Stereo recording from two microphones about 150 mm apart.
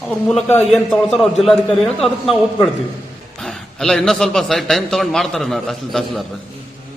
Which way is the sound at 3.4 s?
5° left (ahead or behind).